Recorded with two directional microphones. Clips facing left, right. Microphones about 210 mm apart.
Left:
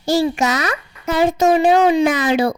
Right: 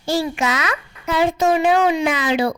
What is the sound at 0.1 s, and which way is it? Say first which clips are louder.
A child's voice: left 4 dB; 40° left (ahead or behind).